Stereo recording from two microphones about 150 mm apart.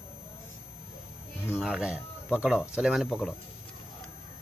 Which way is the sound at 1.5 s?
5° right (ahead or behind).